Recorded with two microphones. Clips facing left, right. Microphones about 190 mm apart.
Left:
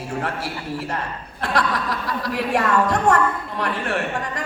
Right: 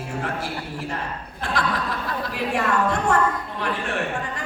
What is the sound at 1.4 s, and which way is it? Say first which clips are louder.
Speech: left 3 dB; 70° left (ahead or behind).